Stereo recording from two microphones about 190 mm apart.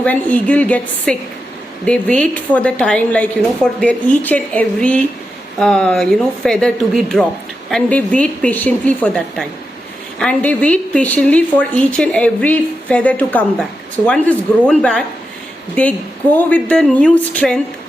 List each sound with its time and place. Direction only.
0.0 s a woman's voice: 10° left (ahead or behind)